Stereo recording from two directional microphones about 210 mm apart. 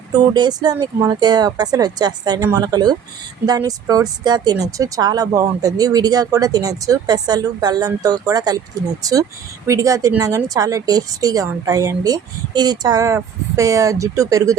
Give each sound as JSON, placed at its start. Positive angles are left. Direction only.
{"t": 0.1, "sound": "speech", "side_deg": -20}